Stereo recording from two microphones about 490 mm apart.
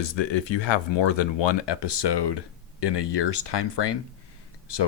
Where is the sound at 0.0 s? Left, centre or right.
Left.